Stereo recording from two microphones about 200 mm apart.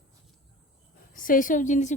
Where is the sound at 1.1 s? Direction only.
45° left (ahead or behind).